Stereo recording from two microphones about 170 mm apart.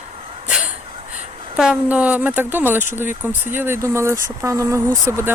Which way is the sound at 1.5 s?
5° right (ahead or behind).